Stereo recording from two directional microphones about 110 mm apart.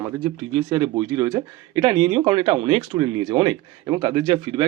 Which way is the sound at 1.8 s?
50° right (ahead or behind).